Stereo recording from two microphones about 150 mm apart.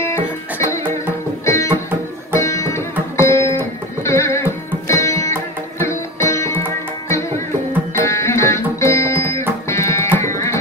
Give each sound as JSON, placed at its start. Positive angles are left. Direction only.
{"t": 1.4, "sound": "music", "side_deg": 20}